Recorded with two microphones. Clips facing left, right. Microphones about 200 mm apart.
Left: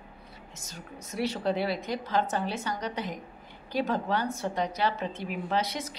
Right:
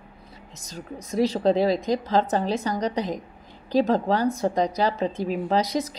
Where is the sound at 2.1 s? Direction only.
35° right (ahead or behind).